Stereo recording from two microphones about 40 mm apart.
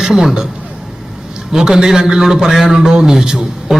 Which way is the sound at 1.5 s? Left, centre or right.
Centre.